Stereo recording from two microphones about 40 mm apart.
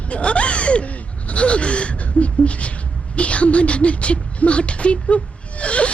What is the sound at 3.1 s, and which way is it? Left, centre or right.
Speech, left.